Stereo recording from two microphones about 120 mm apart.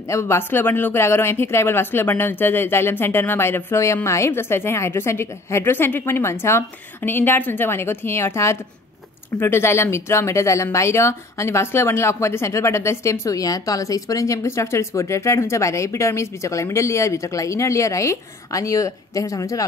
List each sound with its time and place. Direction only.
0.1 s speech: 25° left (ahead or behind)